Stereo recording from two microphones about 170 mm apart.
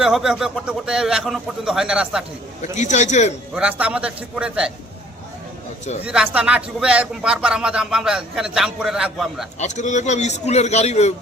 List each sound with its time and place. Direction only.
0.0 s speech: 5° right (ahead or behind)
2.6 s a man's voice: 45° left (ahead or behind)
3.5 s a man's voice: 5° right (ahead or behind)
6.1 s speech: 5° right (ahead or behind)
9.6 s a man's voice: 45° left (ahead or behind)